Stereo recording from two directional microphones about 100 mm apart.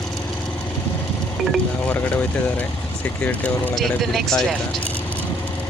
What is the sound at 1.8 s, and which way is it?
Speech, 15° left (ahead or behind).